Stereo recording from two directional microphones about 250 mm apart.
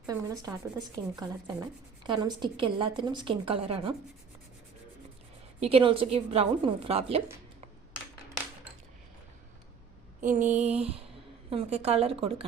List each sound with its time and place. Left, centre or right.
0.0 s a woman's voice: centre
5.5 s a woman's voice: right
10.2 s a sound: right
11.5 s a woman's voice: right